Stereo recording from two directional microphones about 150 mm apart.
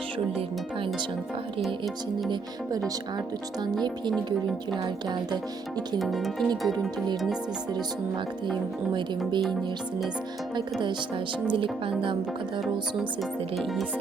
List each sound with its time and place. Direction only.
2.3 s speech: 25° right (ahead or behind)
5.0 s speech: 30° right (ahead or behind)
6.0 s speech: centre (ahead or behind)
8.9 s speech: 30° right (ahead or behind)
10.5 s speech: 30° right (ahead or behind)